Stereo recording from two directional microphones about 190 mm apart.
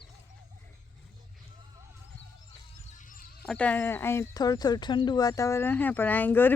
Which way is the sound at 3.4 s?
5° left (ahead or behind).